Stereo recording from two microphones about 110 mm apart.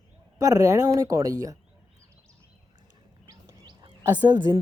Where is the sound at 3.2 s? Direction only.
40° right (ahead or behind).